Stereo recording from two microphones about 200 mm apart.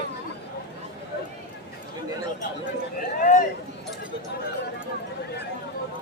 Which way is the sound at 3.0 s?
40° left (ahead or behind).